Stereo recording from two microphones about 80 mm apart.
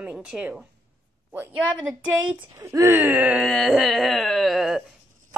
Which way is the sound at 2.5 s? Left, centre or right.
Right.